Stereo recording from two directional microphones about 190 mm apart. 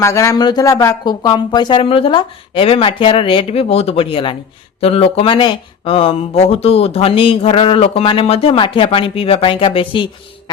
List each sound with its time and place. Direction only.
0.0 s speech: 15° left (ahead or behind)